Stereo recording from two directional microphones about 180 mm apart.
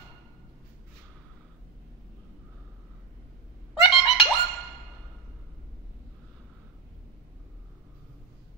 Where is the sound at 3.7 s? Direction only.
Centre (ahead or behind).